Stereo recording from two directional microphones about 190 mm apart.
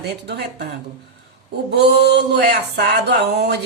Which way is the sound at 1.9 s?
60° right (ahead or behind).